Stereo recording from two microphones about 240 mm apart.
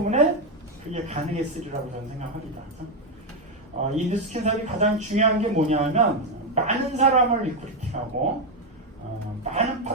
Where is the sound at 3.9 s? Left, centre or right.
Right.